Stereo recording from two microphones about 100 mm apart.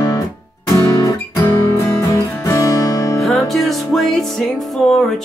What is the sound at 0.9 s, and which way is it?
Music, 45° left (ahead or behind).